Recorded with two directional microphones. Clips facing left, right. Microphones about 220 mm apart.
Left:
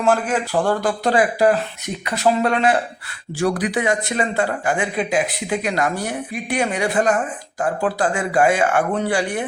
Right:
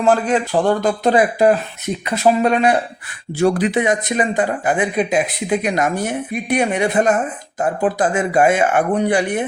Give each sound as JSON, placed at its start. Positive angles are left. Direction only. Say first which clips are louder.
{"t": 0.0, "sound": "speech", "louder": "right 3 dB", "side_deg": -20}